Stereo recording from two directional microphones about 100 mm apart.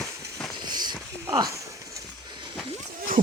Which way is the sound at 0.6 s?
45° right (ahead or behind).